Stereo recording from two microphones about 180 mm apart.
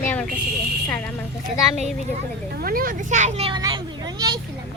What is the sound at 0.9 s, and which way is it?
Speech, 5° left (ahead or behind).